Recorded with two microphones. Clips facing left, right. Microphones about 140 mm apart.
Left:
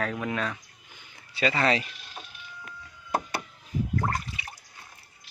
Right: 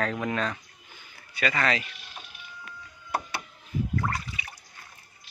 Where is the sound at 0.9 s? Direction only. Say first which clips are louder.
Left 2 dB; 30° left (ahead or behind).